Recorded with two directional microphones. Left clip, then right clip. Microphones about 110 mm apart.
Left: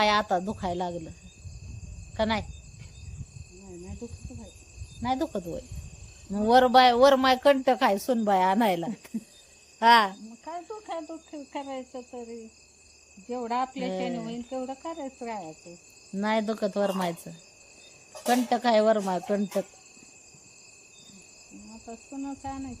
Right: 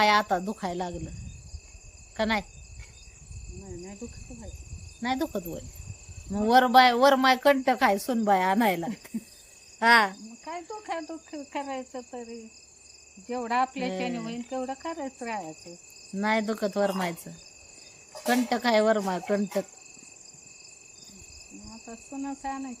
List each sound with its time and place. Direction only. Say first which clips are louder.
0.0 s speech: right 1 dB; 15° left (ahead or behind)
2.1 s speech: even; 10° left (ahead or behind)
4.9 s cricket: left 1 dB; centre (ahead or behind)
6.3 s speech: even; 15° left (ahead or behind)
10.4 s cricket: right 1 dB; 5° right (ahead or behind)
13.2 s speech: right 2 dB; 5° right (ahead or behind)
16.1 s speech: right 1 dB; 15° left (ahead or behind)
18.4 s speech: left 1 dB; 10° left (ahead or behind)
21.8 s speech: right 1 dB; 10° right (ahead or behind)